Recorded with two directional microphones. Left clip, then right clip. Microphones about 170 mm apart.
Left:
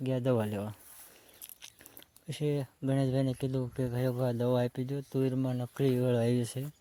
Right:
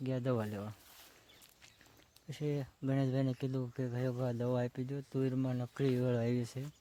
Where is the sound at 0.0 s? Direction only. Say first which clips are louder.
Left 6 dB; 25° left (ahead or behind).